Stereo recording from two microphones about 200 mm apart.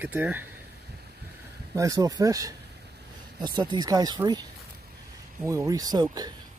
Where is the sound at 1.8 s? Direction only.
15° right (ahead or behind).